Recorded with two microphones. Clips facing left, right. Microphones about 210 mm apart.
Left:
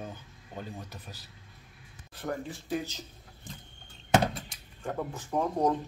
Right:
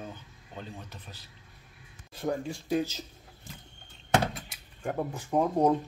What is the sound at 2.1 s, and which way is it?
Speech, 15° right (ahead or behind).